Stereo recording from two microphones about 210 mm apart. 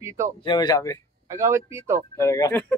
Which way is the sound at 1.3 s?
15° right (ahead or behind).